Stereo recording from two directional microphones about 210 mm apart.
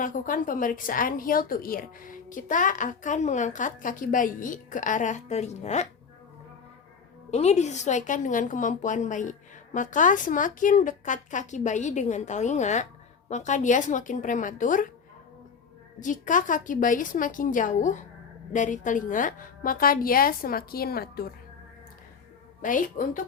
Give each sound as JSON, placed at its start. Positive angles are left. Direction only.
{"t": 0.0, "sound": "a woman's voice", "side_deg": 40}
{"t": 7.3, "sound": "a woman's voice", "side_deg": 30}
{"t": 16.0, "sound": "a woman's voice", "side_deg": 40}
{"t": 22.6, "sound": "a woman's voice", "side_deg": 40}